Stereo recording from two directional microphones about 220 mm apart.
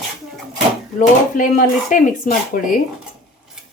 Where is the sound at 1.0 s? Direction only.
35° left (ahead or behind).